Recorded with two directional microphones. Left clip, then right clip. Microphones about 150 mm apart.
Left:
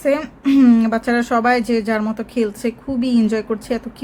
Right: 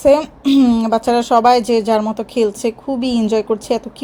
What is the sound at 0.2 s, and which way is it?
A woman's voice, 5° right (ahead or behind).